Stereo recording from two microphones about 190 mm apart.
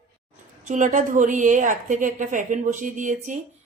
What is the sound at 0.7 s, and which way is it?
A woman's voice, 40° right (ahead or behind).